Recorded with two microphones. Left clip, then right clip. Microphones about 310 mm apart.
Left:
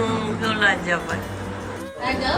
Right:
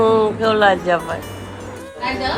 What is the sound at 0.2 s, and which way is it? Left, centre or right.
Music, centre.